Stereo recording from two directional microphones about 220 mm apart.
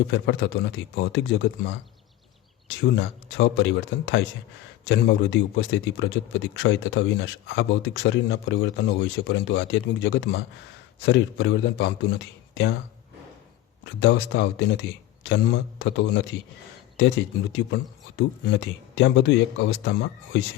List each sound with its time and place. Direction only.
0.1 s speech: 55° left (ahead or behind)
13.8 s speech: 55° left (ahead or behind)